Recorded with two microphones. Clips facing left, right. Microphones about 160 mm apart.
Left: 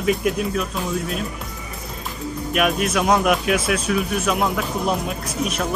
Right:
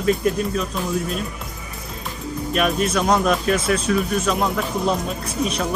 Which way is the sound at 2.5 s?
5° left (ahead or behind).